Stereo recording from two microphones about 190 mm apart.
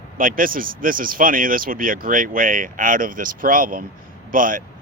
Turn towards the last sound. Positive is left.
turn(degrees=-45)  # may be behind; listen again after turning